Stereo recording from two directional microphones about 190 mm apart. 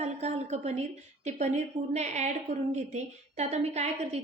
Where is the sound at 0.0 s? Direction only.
35° right (ahead or behind).